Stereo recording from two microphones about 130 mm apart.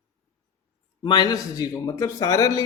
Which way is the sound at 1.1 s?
30° left (ahead or behind).